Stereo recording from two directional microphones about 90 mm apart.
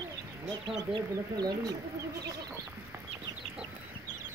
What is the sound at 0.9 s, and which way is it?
Speech, 50° right (ahead or behind).